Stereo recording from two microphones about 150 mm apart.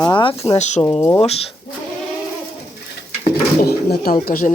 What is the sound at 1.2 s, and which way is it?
Speech, 40° left (ahead or behind).